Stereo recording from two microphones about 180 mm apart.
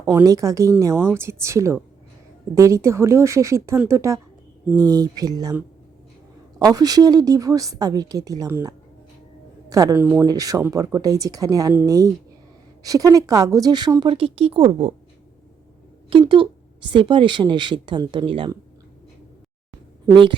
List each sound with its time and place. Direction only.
0.0 s speech: 15° right (ahead or behind); by 14.9 s 35° right (ahead or behind)
16.0 s speech: 30° right (ahead or behind)